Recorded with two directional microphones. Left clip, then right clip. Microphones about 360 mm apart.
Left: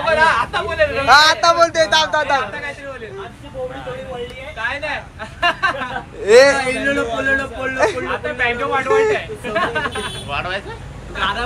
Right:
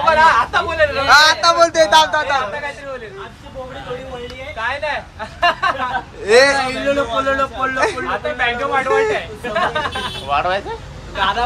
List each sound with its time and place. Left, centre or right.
0.0 s a sound: right
1.0 s a man's voice: centre
4.6 s a sound: right
6.2 s a man's voice: centre
8.1 s speech: right
8.8 s a man's voice: centre
9.1 s speech: right